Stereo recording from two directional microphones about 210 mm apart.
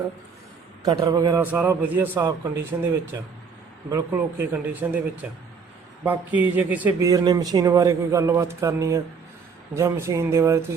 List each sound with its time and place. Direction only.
0.9 s a man's voice: 15° right (ahead or behind)
3.8 s a man's voice: 15° right (ahead or behind)